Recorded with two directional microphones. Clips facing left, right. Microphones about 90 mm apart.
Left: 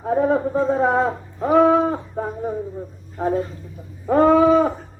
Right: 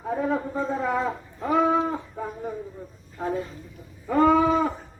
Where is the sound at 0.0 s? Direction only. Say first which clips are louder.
Left 7 dB; 40° left (ahead or behind).